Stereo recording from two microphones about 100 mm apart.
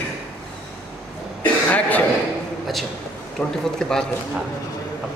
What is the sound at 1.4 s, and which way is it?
Cough, 15° left (ahead or behind).